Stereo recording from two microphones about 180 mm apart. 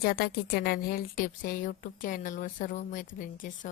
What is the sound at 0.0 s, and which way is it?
A woman's voice, 60° left (ahead or behind).